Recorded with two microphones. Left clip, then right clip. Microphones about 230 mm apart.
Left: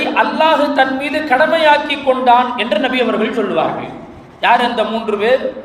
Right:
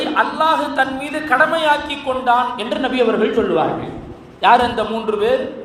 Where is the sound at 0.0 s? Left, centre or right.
Right.